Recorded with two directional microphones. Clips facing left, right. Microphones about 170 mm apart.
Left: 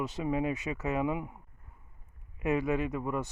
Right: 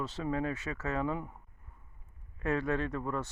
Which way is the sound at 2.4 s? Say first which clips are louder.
Left 2 dB; 10° left (ahead or behind).